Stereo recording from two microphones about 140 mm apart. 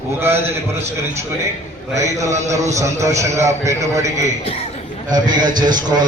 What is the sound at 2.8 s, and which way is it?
A man's voice, 20° right (ahead or behind).